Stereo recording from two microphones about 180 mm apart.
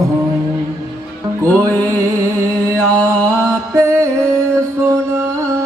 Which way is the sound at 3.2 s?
15° right (ahead or behind).